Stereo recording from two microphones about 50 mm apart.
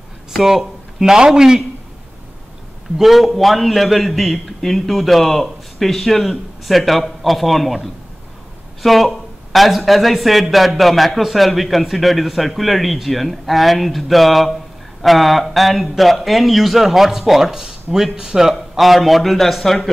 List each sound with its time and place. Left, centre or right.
0.3 s a sound: centre
1.1 s a man's voice: centre
3.0 s a man's voice: centre